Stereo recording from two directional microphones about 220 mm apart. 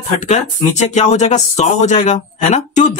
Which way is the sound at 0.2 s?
30° left (ahead or behind).